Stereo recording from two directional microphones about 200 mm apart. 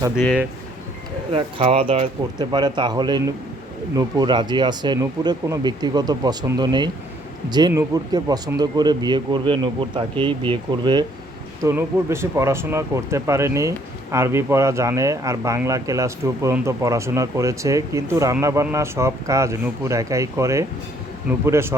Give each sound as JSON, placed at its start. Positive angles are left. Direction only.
{"t": 1.3, "sound": "speech", "side_deg": -30}
{"t": 11.6, "sound": "speech", "side_deg": -10}